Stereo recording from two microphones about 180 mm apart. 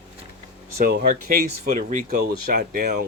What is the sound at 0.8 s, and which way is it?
Speech, 60° right (ahead or behind).